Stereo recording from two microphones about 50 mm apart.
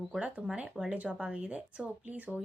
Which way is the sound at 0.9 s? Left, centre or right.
Right.